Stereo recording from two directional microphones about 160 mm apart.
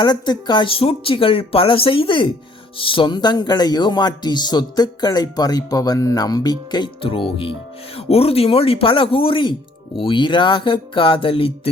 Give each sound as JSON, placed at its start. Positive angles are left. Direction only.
{"t": 0.0, "sound": "speech", "side_deg": 25}